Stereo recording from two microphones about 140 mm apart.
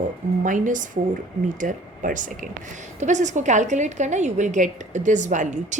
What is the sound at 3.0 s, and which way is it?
A woman's voice, 60° right (ahead or behind).